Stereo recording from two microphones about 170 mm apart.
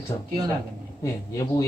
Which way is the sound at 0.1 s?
25° left (ahead or behind).